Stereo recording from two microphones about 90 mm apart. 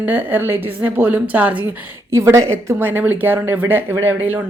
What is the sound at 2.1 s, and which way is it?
Speech, 35° right (ahead or behind).